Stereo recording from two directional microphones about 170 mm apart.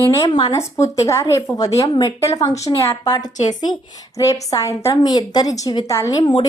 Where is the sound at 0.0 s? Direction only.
20° left (ahead or behind).